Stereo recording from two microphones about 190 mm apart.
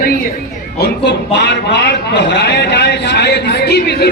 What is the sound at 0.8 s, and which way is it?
A man's voice, 65° left (ahead or behind).